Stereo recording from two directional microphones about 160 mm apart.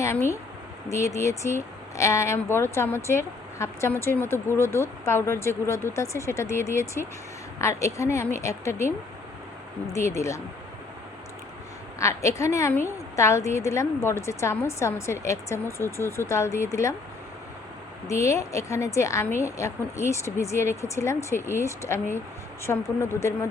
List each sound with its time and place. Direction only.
0.0 s speech: 15° left (ahead or behind)
9.9 s speech: 20° left (ahead or behind)
11.9 s speech: 20° left (ahead or behind)
18.1 s speech: 20° left (ahead or behind)